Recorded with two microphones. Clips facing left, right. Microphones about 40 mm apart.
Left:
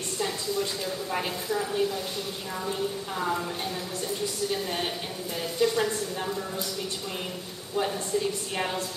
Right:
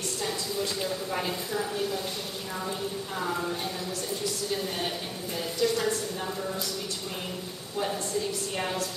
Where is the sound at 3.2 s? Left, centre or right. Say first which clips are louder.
Left 1 dB; centre; by 6.2 s left.